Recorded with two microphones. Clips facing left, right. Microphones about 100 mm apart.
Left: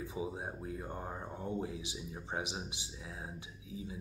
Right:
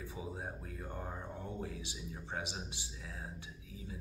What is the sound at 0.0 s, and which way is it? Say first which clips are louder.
A man's voice: left 4 dB; 20° left (ahead or behind).